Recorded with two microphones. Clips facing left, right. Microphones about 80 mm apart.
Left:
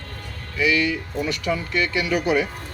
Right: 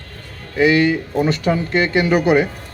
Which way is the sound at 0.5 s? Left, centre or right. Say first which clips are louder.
Right 7 dB; right.